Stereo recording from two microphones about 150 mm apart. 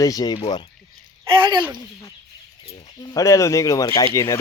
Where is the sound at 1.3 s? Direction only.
35° right (ahead or behind).